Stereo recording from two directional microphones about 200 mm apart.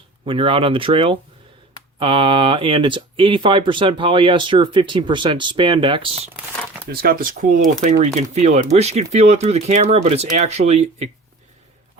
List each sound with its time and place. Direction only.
0.3 s speech: 25° right (ahead or behind)
6.9 s speech: 50° right (ahead or behind); by 11.1 s 35° right (ahead or behind)